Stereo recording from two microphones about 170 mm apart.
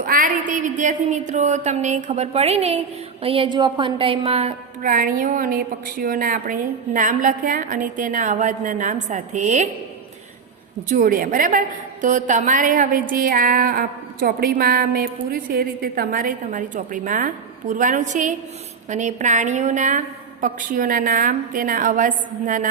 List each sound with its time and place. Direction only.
0.0 s a woman's voice: 55° right (ahead or behind); by 4.5 s 35° right (ahead or behind)
4.8 s a woman's voice: 55° right (ahead or behind)
10.8 s a woman's voice: 55° right (ahead or behind)